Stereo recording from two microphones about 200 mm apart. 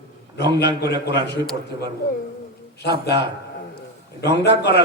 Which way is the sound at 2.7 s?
55° left (ahead or behind).